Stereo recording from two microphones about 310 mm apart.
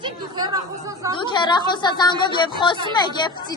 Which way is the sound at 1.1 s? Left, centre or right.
Centre.